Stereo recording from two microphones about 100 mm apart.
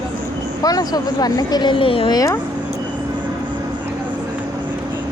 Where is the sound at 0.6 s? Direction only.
40° left (ahead or behind); by 2.1 s 60° left (ahead or behind).